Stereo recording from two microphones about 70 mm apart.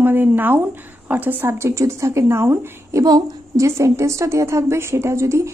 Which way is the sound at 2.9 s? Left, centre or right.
Right.